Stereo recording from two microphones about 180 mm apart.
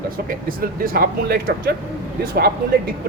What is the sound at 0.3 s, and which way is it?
Speech, 50° right (ahead or behind).